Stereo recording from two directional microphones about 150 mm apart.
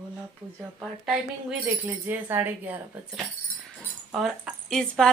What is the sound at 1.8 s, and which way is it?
Speech, 15° right (ahead or behind).